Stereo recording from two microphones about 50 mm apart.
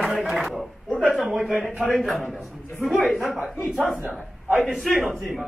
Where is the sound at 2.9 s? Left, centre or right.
Centre.